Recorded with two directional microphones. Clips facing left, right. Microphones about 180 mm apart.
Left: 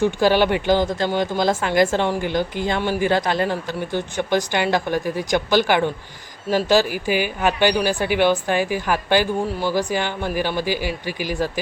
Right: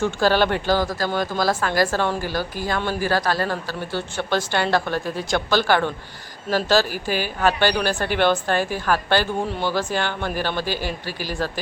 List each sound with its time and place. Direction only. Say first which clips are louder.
0.0 s speech: left 2 dB; 15° left (ahead or behind)